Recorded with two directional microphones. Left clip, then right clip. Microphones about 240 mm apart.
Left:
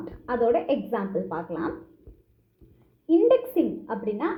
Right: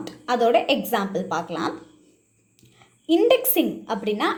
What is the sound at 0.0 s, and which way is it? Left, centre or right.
A woman's voice, centre.